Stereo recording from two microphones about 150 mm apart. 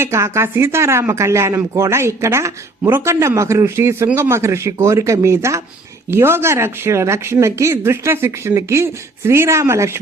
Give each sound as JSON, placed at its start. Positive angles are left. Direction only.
{"t": 0.0, "sound": "speech", "side_deg": -20}